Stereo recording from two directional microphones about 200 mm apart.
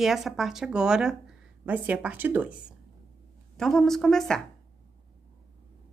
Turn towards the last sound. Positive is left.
turn(degrees=0)  # may be behind; listen again after turning